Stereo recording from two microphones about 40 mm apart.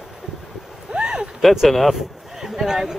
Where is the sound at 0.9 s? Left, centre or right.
Right.